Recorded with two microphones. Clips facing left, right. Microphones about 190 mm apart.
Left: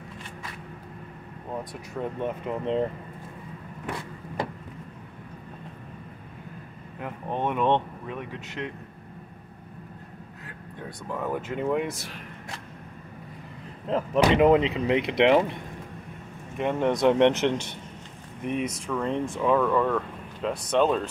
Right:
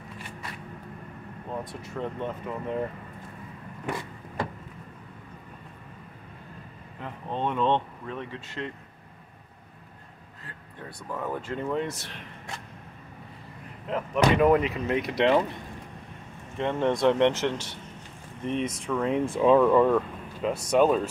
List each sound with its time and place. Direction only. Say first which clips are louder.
1.6 s speech: left 1 dB; 15° left (ahead or behind)
7.0 s speech: left 2 dB; 15° left (ahead or behind)
11.1 s speech: left 2 dB; 10° left (ahead or behind)
13.8 s speech: left 2 dB; 30° left (ahead or behind)
14.4 s speech: left 2 dB; 20° left (ahead or behind)
16.5 s speech: left 1 dB; 15° left (ahead or behind)
18.9 s speech: right 3 dB; 5° right (ahead or behind)
19.3 s speech: right 4 dB; 15° right (ahead or behind)